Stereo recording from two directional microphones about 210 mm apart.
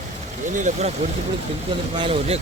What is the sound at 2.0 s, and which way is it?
Speech, 30° right (ahead or behind).